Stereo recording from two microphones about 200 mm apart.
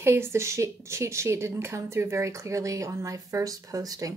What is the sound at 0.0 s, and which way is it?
A woman's voice, 15° right (ahead or behind).